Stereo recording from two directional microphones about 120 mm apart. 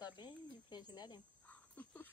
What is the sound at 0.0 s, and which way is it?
Cricket, 35° left (ahead or behind).